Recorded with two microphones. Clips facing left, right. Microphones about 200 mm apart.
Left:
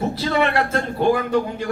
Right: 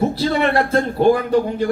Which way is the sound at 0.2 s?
35° right (ahead or behind).